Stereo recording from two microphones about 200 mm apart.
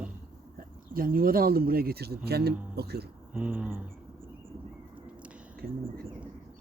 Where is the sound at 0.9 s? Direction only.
45° right (ahead or behind).